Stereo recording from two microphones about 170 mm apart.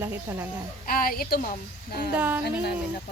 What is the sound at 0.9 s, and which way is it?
A woman's voice, 60° left (ahead or behind).